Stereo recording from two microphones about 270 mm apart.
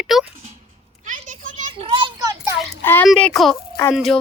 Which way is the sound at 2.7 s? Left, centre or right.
Centre.